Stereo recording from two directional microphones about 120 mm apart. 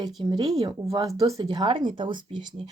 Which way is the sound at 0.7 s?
25° right (ahead or behind).